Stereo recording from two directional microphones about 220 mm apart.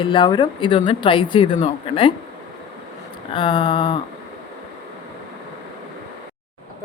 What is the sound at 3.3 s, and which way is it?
Speech, 20° left (ahead or behind).